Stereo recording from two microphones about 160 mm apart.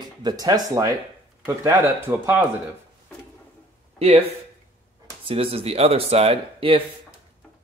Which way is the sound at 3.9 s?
40° right (ahead or behind).